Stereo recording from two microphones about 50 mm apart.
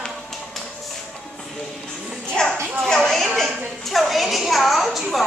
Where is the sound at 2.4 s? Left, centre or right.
Centre.